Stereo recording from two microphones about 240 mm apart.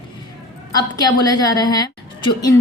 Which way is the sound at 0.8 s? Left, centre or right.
Centre.